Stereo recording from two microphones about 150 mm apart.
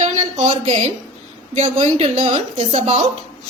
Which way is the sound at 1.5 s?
45° right (ahead or behind).